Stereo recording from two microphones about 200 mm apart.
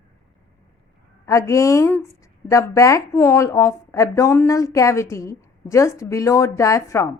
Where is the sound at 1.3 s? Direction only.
15° left (ahead or behind).